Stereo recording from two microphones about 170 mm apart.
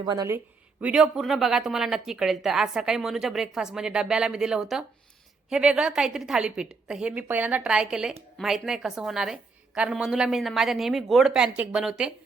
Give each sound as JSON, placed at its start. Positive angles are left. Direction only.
{"t": 0.0, "sound": "speech", "side_deg": -25}
{"t": 0.8, "sound": "speech", "side_deg": -5}